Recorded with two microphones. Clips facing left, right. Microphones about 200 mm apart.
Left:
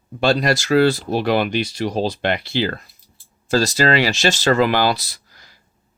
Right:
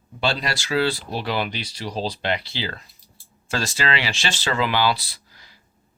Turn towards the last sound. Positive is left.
turn(degrees=45)  # may be behind; listen again after turning